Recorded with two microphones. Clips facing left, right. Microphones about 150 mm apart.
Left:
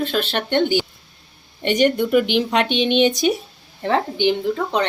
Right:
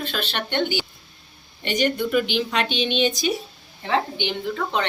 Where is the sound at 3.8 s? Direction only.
45° left (ahead or behind).